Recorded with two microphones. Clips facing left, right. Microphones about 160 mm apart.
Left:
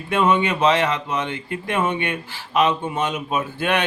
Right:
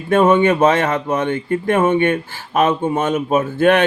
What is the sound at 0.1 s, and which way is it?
Speech, 50° right (ahead or behind).